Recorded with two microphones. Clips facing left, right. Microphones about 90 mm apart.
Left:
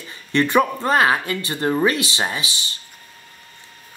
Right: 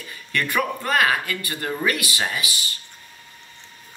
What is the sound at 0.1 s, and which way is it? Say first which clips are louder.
Speech: left 7 dB; 25° left (ahead or behind).